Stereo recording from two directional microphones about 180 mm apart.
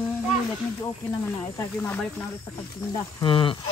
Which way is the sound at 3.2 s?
30° left (ahead or behind).